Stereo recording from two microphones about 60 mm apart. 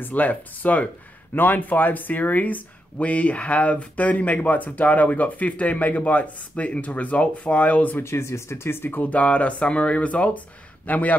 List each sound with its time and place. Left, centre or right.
0.0 s speech: left
8.0 s speech: left
9.0 s speech: left